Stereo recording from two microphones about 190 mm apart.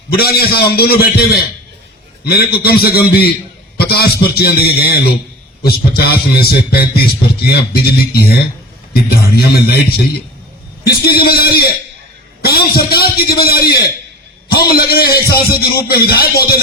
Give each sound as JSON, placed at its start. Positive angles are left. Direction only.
{"t": 0.1, "sound": "a man's voice", "side_deg": 55}
{"t": 10.8, "sound": "a man's voice", "side_deg": 55}